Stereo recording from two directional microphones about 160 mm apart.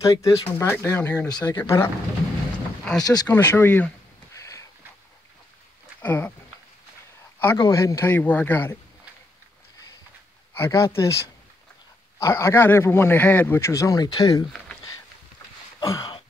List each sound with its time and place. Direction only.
0.0 s speech: 20° left (ahead or behind)
3.0 s speech: 25° left (ahead or behind)
3.3 s speech: 10° left (ahead or behind)
4.4 s a sound: 20° left (ahead or behind)
5.9 s speech: 10° left (ahead or behind)
7.5 s speech: 20° left (ahead or behind)
10.5 s speech: 15° left (ahead or behind)
15.8 s a sound: 25° left (ahead or behind)